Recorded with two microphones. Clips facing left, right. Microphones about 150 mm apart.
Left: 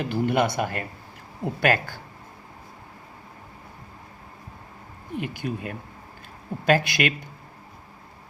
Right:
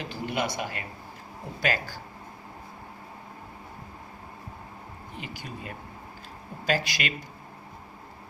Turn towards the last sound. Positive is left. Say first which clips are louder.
# left 7 dB
turn(degrees=55)  # may be behind; listen again after turning